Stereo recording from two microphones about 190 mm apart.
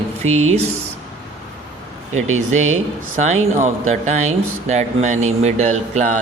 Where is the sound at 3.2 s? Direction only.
35° right (ahead or behind).